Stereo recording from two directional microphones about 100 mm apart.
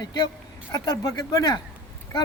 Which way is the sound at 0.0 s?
45° left (ahead or behind).